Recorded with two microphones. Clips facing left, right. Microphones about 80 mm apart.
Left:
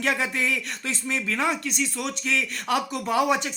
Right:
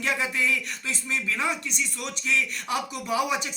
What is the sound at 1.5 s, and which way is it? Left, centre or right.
Speech, left.